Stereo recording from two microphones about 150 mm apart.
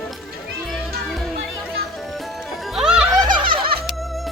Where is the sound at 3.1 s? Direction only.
30° right (ahead or behind).